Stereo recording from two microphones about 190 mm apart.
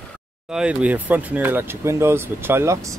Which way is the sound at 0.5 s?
5° right (ahead or behind).